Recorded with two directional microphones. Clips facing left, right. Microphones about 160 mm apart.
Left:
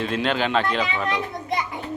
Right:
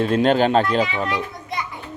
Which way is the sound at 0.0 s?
45° right (ahead or behind).